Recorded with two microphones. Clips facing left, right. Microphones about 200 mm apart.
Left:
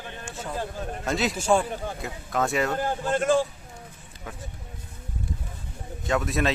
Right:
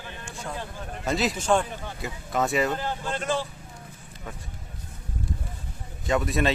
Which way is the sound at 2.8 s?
50° left (ahead or behind).